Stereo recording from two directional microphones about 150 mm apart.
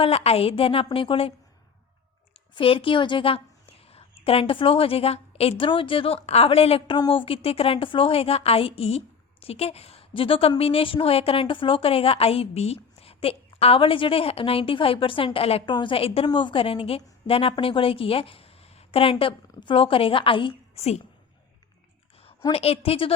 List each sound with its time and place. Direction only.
0.0 s a woman's voice: 40° left (ahead or behind)
2.6 s a woman's voice: 35° left (ahead or behind)
22.5 s a woman's voice: 40° left (ahead or behind)